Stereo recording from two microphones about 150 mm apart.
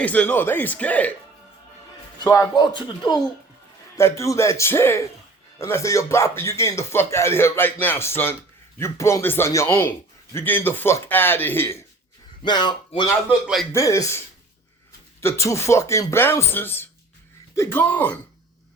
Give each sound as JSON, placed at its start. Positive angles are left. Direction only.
{"t": 0.0, "sound": "speech", "side_deg": 10}
{"t": 2.2, "sound": "speech", "side_deg": 20}
{"t": 2.6, "sound": "a man's voice", "side_deg": 30}
{"t": 12.4, "sound": "a man's voice", "side_deg": 30}
{"t": 15.2, "sound": "speech", "side_deg": 20}